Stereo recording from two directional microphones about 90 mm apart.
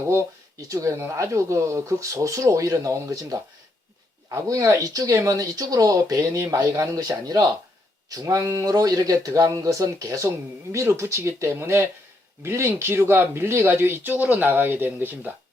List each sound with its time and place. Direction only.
0.0 s speech: 30° right (ahead or behind)